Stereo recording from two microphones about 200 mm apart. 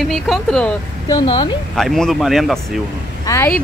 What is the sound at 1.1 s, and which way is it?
Speech, 20° left (ahead or behind).